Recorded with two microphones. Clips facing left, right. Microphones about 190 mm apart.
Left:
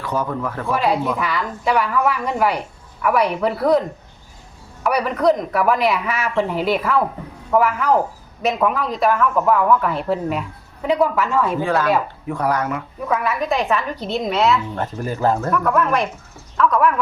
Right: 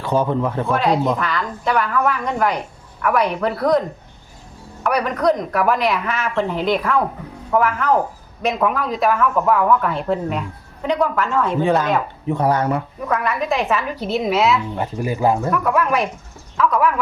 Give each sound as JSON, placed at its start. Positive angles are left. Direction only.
{"t": 0.0, "sound": "speech", "side_deg": -25}
{"t": 0.7, "sound": "a woman's voice", "side_deg": 5}
{"t": 11.6, "sound": "speech", "side_deg": -20}
{"t": 13.1, "sound": "a woman's voice", "side_deg": 0}